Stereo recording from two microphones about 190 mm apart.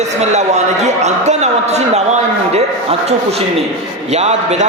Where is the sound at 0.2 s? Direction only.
35° right (ahead or behind).